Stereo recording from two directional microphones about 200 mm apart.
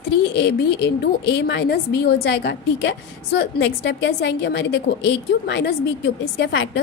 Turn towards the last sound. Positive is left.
turn(degrees=65)  # may be behind; listen again after turning